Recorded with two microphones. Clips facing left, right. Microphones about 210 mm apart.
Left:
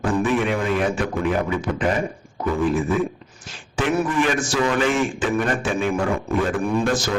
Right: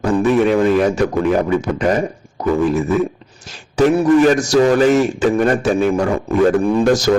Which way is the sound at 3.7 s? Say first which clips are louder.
Right 9 dB; 40° right (ahead or behind).